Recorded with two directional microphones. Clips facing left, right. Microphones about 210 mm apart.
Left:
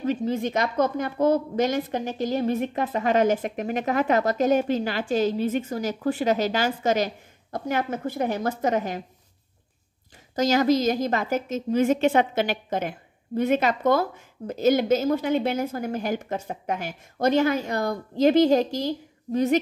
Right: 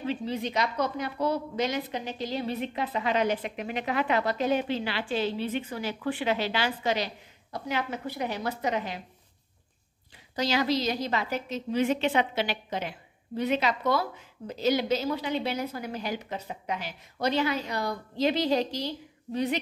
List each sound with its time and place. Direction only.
0.0 s a woman's voice: 45° left (ahead or behind)
10.3 s a woman's voice: 45° left (ahead or behind)